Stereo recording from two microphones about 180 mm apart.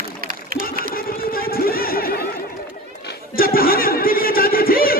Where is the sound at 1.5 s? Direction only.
55° left (ahead or behind).